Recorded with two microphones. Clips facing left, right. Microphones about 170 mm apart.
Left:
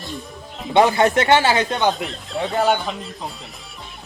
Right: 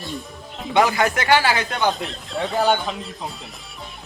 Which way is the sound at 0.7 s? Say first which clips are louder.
Left 3 dB; 25° left (ahead or behind).